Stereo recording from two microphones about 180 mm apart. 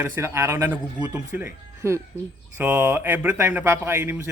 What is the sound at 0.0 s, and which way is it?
A man's voice, 15° right (ahead or behind).